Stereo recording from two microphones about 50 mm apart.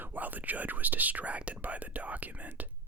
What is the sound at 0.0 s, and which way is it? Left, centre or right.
Speech, right.